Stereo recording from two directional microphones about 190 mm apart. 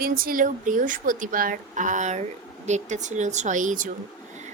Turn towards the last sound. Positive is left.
turn(degrees=-40)  # may be behind; listen again after turning